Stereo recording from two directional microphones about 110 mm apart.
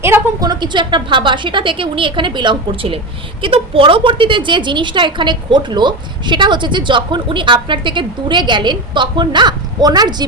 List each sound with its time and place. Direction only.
0.3 s a woman's voice: 40° right (ahead or behind)